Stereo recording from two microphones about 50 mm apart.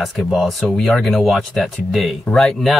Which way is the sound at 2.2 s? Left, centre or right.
Centre.